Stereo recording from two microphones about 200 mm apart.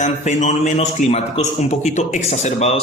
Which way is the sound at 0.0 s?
35° left (ahead or behind).